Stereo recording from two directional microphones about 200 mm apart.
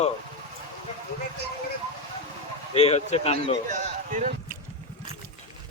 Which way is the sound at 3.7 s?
35° right (ahead or behind).